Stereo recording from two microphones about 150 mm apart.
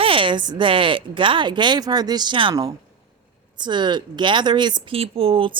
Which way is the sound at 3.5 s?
30° right (ahead or behind).